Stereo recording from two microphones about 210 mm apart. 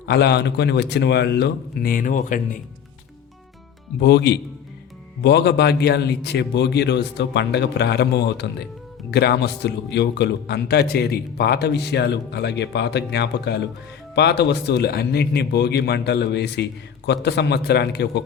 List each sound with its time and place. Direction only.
0.0 s speech: 50° left (ahead or behind)
4.0 s speech: 50° left (ahead or behind)